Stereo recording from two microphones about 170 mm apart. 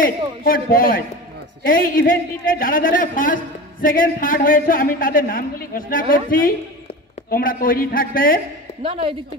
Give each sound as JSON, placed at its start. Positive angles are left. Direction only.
{"t": 0.0, "sound": "a man's voice", "side_deg": 55}
{"t": 8.8, "sound": "a woman's voice", "side_deg": -35}